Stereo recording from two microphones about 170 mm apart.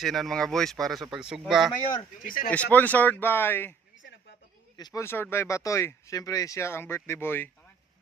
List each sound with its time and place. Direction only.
0.0 s speech: centre (ahead or behind)
2.1 s speech: 55° left (ahead or behind)
2.5 s speech: 10° left (ahead or behind)
4.0 s a sound: 75° left (ahead or behind)
4.8 s speech: 20° left (ahead or behind)